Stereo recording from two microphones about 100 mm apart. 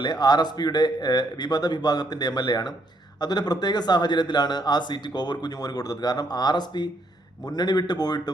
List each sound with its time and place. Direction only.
0.0 s a man's voice: 45° left (ahead or behind)